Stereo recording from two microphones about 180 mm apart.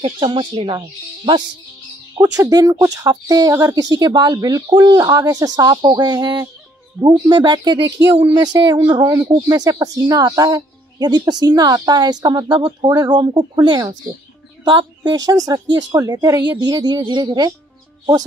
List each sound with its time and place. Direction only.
0.0 s speech: 30° right (ahead or behind)